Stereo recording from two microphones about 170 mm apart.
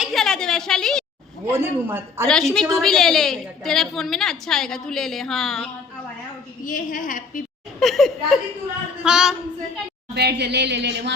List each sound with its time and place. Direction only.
0.0 s a sound: centre (ahead or behind)
1.5 s a woman's voice: 15° right (ahead or behind)
2.2 s a woman's voice: 5° left (ahead or behind)
6.6 s a woman's voice: 55° left (ahead or behind)
7.8 s a woman's voice: centre (ahead or behind)
10.2 s speech: 75° right (ahead or behind)